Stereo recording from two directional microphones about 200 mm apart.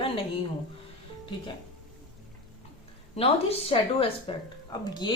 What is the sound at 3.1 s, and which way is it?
A woman's voice, 30° left (ahead or behind).